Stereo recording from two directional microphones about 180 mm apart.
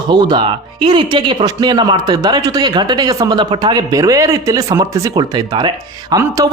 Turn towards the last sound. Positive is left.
turn(degrees=-20)  # may be behind; listen again after turning